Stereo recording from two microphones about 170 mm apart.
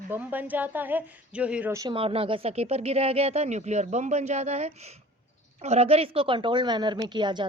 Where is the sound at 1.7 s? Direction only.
25° right (ahead or behind).